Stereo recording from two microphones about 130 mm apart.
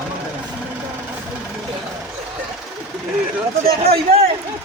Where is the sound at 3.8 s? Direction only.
50° right (ahead or behind).